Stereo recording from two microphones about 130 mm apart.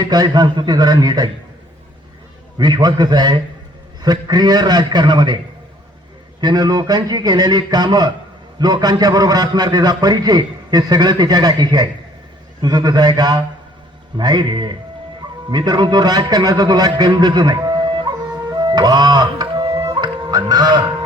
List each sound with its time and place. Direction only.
0.0 s a man's voice: 30° right (ahead or behind)
2.6 s a man's voice: 35° right (ahead or behind)
6.4 s a man's voice: 30° right (ahead or behind)
18.5 s music: 35° right (ahead or behind)